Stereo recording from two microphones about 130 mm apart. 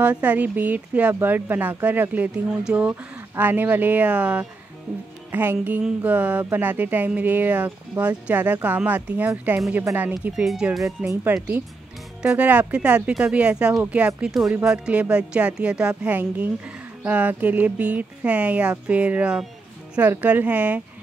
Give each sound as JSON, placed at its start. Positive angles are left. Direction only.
{"t": 0.0, "sound": "speech", "side_deg": -10}